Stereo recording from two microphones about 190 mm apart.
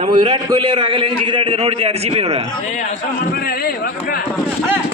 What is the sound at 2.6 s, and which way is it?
A man's voice, 40° left (ahead or behind).